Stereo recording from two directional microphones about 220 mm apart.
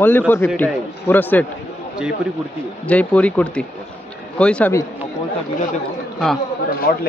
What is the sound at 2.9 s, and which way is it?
A man's voice, 5° left (ahead or behind).